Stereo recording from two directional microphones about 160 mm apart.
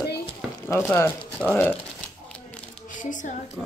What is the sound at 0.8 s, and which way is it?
Speech, 10° left (ahead or behind).